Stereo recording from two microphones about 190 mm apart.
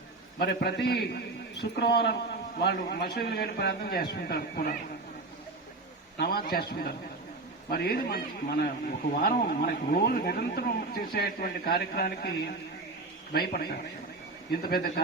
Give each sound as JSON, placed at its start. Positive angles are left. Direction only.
{"t": 0.3, "sound": "a man's voice", "side_deg": 60}
{"t": 6.1, "sound": "a man's voice", "side_deg": 55}